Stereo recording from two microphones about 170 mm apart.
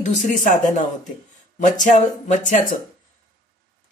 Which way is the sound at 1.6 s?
45° left (ahead or behind).